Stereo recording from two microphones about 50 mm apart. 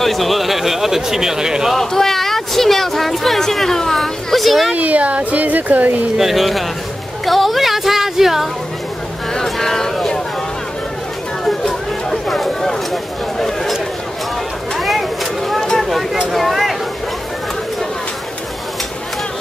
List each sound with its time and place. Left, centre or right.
0.0 s speech: centre
1.7 s speech: centre
4.7 s speech: right
6.1 s speech: centre
9.3 s a sound: centre
11.4 s a sound: centre
14.8 s vehicle: centre
15.8 s speech: centre